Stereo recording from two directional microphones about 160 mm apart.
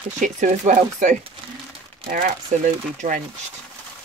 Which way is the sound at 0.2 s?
50° right (ahead or behind).